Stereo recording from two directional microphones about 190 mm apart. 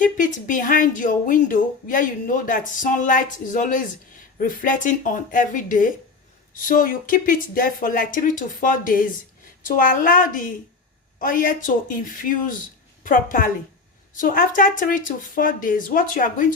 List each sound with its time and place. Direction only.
0.0 s speech: 45° left (ahead or behind)